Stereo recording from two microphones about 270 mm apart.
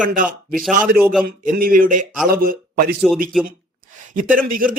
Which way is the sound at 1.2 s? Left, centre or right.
Right.